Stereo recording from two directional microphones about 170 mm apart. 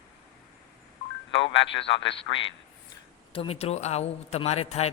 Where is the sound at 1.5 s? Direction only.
90° left.